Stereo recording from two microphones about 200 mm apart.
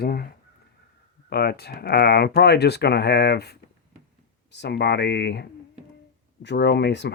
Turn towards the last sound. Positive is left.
turn(degrees=60)  # may be behind; listen again after turning